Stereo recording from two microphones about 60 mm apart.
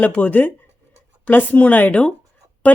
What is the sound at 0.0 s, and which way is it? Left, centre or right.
Speech, left.